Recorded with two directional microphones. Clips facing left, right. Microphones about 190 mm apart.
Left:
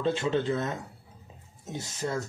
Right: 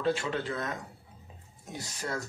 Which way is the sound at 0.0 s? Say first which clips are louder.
Left 3 dB; 25° left (ahead or behind).